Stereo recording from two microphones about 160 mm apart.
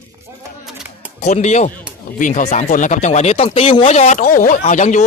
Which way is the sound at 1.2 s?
45° left (ahead or behind).